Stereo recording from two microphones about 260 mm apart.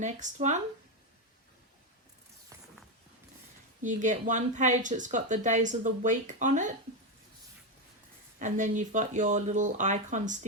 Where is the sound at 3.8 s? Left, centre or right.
Right.